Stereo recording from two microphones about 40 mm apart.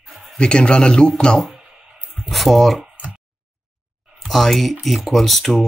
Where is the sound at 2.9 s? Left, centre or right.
Right.